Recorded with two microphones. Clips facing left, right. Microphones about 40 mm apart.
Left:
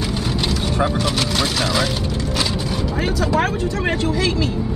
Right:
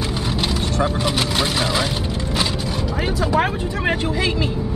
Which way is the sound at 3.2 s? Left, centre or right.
Centre.